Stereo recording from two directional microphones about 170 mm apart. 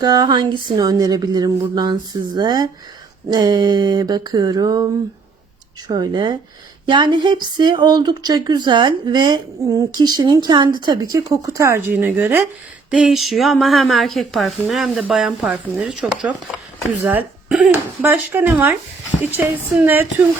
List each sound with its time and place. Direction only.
0.0 s speech: 25° right (ahead or behind)
5.9 s a woman's voice: 25° right (ahead or behind)